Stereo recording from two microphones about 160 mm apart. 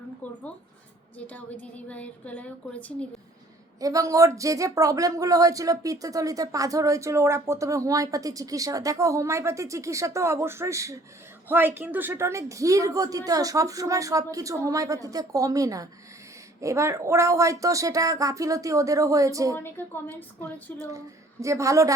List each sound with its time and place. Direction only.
1.3 s a woman's voice: 10° left (ahead or behind)
3.8 s speech: 20° right (ahead or behind)
19.5 s a woman's voice: 10° left (ahead or behind)
21.4 s speech: 20° right (ahead or behind)